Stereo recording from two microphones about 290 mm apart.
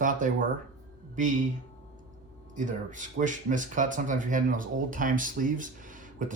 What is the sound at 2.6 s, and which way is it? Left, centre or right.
Speech, right.